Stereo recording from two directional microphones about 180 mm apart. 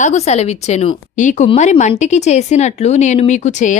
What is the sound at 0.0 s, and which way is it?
Speech, 40° left (ahead or behind).